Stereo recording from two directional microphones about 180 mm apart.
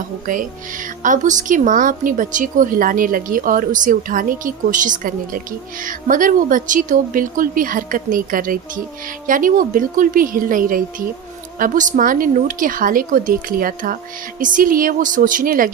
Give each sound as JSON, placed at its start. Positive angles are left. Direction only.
{"t": 0.3, "sound": "a woman's voice", "side_deg": -45}